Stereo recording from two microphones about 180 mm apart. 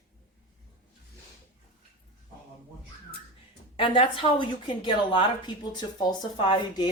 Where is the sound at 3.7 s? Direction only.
30° left (ahead or behind).